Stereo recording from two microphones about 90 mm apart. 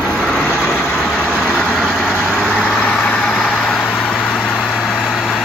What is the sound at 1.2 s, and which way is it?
Vehicle, 15° right (ahead or behind).